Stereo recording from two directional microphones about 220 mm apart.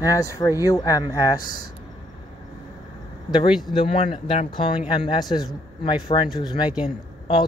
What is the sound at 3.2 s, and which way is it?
Speech, 20° left (ahead or behind).